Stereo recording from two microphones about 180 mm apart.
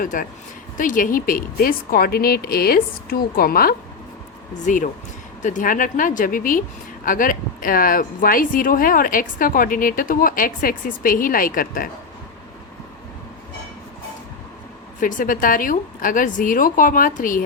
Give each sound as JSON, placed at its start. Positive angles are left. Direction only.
{"t": 0.0, "sound": "speech", "side_deg": 50}
{"t": 15.0, "sound": "speech", "side_deg": 50}